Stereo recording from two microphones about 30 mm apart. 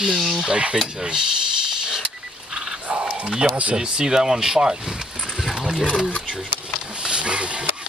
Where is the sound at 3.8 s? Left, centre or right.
Right.